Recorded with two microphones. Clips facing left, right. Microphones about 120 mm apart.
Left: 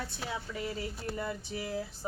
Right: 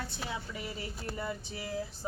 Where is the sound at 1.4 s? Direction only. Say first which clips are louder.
Left 4 dB; 30° right (ahead or behind).